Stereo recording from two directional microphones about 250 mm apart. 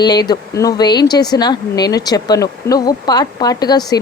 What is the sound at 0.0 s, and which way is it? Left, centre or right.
Speech, centre.